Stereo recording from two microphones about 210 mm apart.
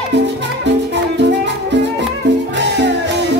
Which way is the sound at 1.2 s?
55° right (ahead or behind).